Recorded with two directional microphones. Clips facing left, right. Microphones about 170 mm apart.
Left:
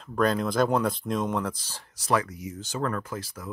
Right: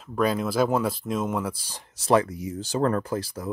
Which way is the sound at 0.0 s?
5° right (ahead or behind).